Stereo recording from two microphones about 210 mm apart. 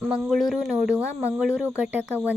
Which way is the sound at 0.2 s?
Centre (ahead or behind).